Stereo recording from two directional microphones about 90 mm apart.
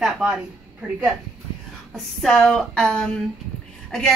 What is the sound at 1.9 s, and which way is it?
A woman's voice, 5° left (ahead or behind).